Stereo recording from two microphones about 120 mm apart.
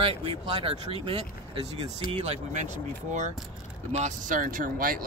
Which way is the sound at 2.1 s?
70° right (ahead or behind).